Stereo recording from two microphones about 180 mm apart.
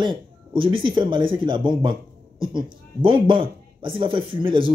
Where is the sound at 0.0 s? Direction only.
25° right (ahead or behind).